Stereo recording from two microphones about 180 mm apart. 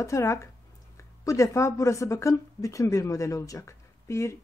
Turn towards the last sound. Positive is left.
turn(degrees=15)  # may be behind; listen again after turning